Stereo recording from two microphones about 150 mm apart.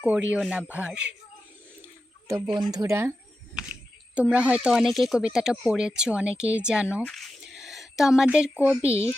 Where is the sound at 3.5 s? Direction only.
5° right (ahead or behind).